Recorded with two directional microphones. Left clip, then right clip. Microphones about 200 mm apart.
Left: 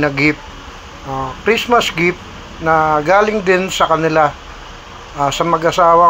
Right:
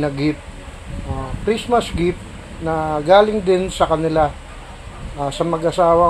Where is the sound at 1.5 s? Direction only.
35° left (ahead or behind).